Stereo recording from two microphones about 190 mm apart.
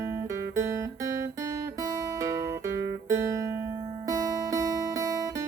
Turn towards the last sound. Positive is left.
turn(degrees=-15)  # may be behind; listen again after turning